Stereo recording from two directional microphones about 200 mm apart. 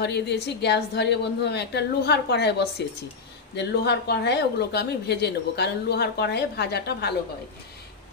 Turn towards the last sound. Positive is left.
turn(degrees=55)  # may be behind; listen again after turning